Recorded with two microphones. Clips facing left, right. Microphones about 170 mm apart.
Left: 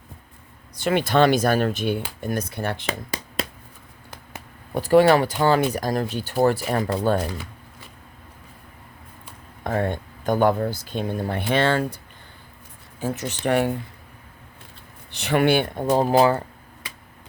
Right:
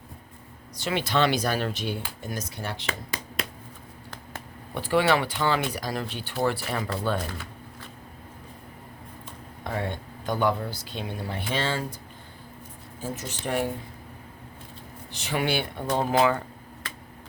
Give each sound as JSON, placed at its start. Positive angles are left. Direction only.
{"t": 0.8, "sound": "speech", "side_deg": 50}
{"t": 2.8, "sound": "a sound", "side_deg": 35}
{"t": 4.1, "sound": "a sound", "side_deg": 5}
{"t": 4.7, "sound": "speech", "side_deg": 40}
{"t": 9.6, "sound": "speech", "side_deg": 50}
{"t": 13.0, "sound": "speech", "side_deg": 70}
{"t": 15.1, "sound": "speech", "side_deg": 65}
{"t": 16.0, "sound": "speech", "side_deg": 35}